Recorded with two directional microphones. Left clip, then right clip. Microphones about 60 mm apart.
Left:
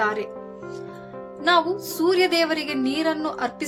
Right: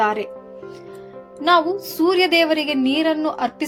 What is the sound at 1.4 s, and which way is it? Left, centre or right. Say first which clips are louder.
A woman's voice: right 3 dB; right.